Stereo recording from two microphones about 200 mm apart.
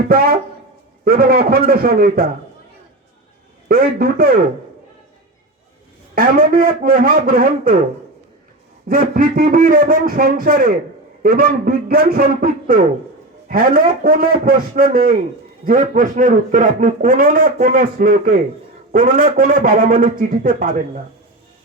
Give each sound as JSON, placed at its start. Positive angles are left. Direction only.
{"t": 0.1, "sound": "a man's voice", "side_deg": -50}
{"t": 3.7, "sound": "a man's voice", "side_deg": -45}
{"t": 6.1, "sound": "a man's voice", "side_deg": -45}
{"t": 8.9, "sound": "a man's voice", "side_deg": -45}